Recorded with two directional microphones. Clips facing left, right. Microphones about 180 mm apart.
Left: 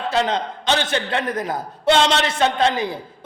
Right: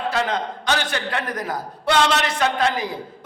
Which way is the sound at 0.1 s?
25° left (ahead or behind).